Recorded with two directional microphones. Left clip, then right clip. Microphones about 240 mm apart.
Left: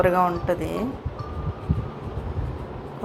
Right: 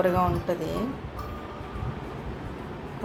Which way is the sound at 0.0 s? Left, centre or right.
Centre.